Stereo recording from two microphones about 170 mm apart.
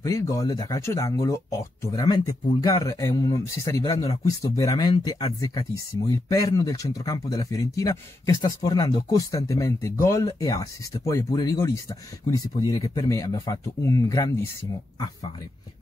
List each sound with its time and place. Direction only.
0.0 s speech: 20° left (ahead or behind)